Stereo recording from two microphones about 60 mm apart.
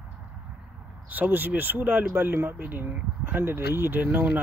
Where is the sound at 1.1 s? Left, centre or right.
Right.